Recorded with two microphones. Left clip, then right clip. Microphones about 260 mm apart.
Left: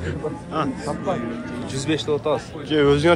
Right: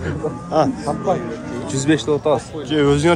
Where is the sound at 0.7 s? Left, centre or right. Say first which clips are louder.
Right 5 dB; right.